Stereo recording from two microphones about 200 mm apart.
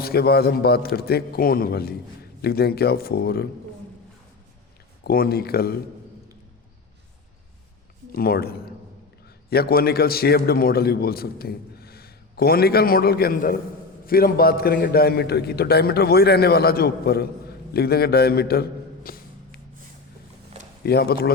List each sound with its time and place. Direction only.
0.0 s a man's voice: 50° left (ahead or behind)
5.0 s a man's voice: 50° left (ahead or behind)
8.1 s a man's voice: 50° left (ahead or behind)
19.0 s a sound: 45° left (ahead or behind)
20.8 s a man's voice: 50° left (ahead or behind)